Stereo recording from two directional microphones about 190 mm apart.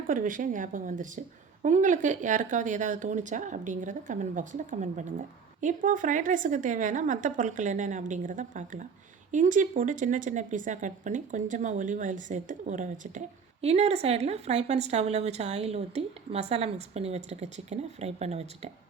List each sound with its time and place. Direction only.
0.1 s speech: 45° right (ahead or behind)